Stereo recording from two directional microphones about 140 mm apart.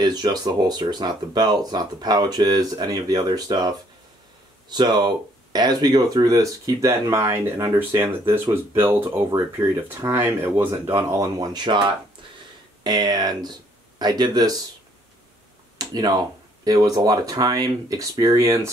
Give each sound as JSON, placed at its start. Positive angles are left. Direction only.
{"t": 0.0, "sound": "speech", "side_deg": -30}
{"t": 15.8, "sound": "speech", "side_deg": -30}